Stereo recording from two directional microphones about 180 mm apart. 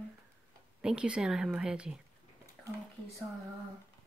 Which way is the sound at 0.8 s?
5° right (ahead or behind).